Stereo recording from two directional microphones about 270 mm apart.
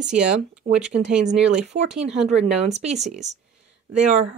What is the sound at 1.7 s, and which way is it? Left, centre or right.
Speech, right.